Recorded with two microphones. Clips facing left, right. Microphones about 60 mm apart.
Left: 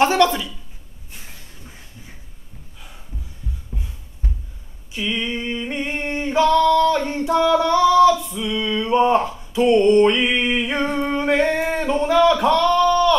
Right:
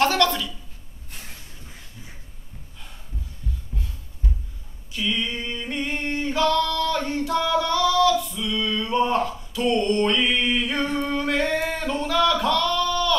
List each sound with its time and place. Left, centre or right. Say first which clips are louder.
0.0 s a sound: left 4 dB; centre
3.7 s heart sounds: left 2 dB; centre
4.9 s singing: left 2 dB; left